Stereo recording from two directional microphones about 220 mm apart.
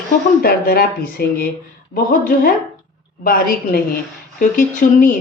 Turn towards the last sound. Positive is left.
turn(degrees=35)  # may be behind; listen again after turning